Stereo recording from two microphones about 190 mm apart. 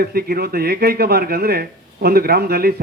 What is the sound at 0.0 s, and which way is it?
A man's voice, 55° right (ahead or behind).